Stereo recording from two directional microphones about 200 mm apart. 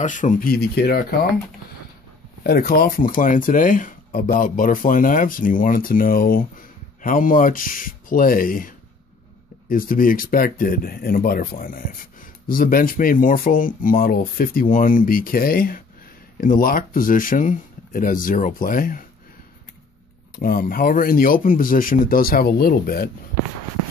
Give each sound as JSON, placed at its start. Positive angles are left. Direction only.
{"t": 0.0, "sound": "speech", "side_deg": 40}
{"t": 2.4, "sound": "speech", "side_deg": 50}
{"t": 20.3, "sound": "speech", "side_deg": 45}